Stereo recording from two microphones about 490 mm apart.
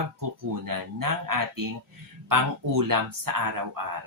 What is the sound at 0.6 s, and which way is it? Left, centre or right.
Speech, right.